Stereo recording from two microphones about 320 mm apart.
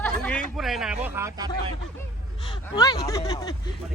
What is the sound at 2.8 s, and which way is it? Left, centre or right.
Speech, centre.